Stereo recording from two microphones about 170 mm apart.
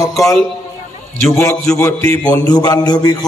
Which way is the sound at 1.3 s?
20° left (ahead or behind).